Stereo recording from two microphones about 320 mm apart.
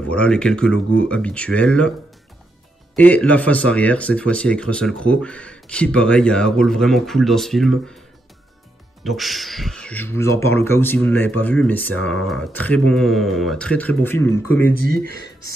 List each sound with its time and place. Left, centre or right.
0.1 s speech: centre
3.0 s speech: centre
9.0 s speech: centre
14.8 s speech: right